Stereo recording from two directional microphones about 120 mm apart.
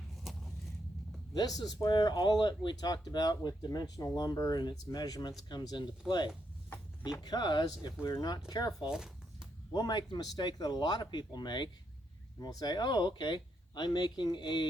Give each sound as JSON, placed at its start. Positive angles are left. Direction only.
{"t": 0.3, "sound": "walk", "side_deg": 0}
{"t": 1.3, "sound": "speech", "side_deg": 35}
{"t": 8.8, "sound": "a sound", "side_deg": -5}
{"t": 9.7, "sound": "speech", "side_deg": 35}